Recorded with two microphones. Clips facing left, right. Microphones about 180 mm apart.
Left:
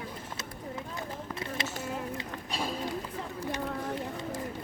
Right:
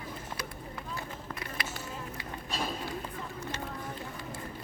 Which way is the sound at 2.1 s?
15° left (ahead or behind).